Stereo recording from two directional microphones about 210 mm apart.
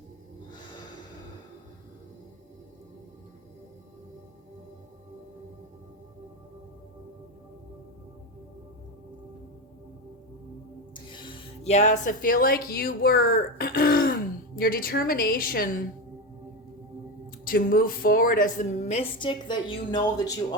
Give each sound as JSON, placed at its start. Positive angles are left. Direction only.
{"t": 10.9, "sound": "a woman's voice", "side_deg": 25}
{"t": 17.4, "sound": "speech", "side_deg": 45}